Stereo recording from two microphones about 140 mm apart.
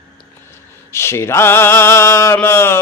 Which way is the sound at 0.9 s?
20° left (ahead or behind).